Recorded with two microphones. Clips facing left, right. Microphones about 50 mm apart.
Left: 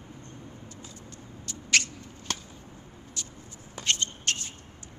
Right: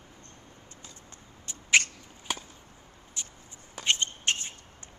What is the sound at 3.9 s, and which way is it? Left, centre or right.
Shuffle, right.